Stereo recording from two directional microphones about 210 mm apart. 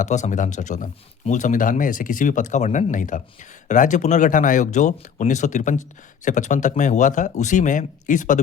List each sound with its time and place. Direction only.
0.0 s speech: 35° left (ahead or behind)